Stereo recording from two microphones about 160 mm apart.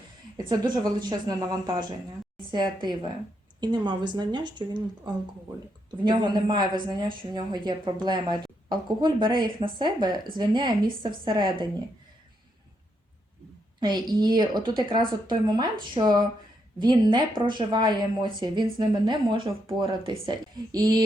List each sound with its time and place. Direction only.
0.3 s speech: 25° right (ahead or behind)
13.7 s speech: 25° right (ahead or behind)